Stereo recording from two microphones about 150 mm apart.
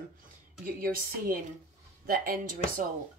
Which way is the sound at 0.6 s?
75° right (ahead or behind).